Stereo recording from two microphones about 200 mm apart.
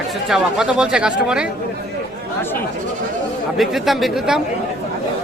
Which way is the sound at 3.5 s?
Centre (ahead or behind).